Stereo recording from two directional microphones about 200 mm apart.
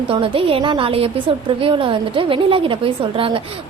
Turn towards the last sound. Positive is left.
turn(degrees=-25)  # may be behind; listen again after turning